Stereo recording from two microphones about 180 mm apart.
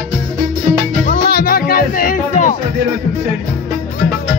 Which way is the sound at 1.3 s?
55° left (ahead or behind).